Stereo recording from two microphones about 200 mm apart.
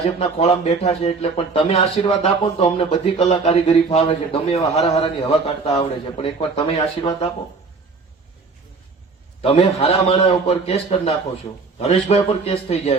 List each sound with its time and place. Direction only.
0.2 s speech: 30° left (ahead or behind)
9.4 s speech: 30° left (ahead or behind)